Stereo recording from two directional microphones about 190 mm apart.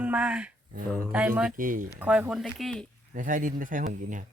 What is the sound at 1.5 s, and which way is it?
Speech, 45° right (ahead or behind).